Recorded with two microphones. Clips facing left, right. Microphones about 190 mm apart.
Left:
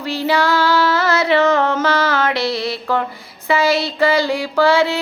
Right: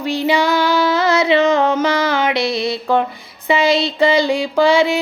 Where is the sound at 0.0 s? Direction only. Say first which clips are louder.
Right 2 dB; 15° right (ahead or behind).